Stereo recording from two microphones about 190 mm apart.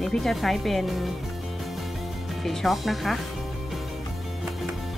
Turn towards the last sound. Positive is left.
turn(degrees=0)  # may be behind; listen again after turning